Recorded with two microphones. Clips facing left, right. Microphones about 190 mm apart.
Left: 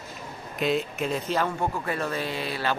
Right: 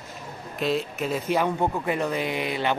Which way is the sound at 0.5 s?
Centre (ahead or behind).